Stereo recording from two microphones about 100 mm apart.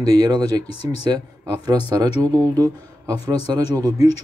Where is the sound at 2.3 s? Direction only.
40° right (ahead or behind).